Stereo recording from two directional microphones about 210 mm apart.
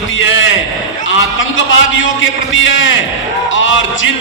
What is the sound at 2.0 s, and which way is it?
Speech, 65° left (ahead or behind).